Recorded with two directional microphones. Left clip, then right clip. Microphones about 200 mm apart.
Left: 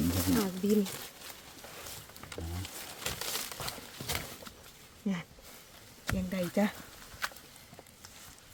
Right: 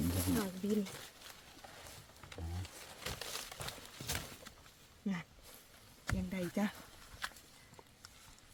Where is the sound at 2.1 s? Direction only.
35° left (ahead or behind).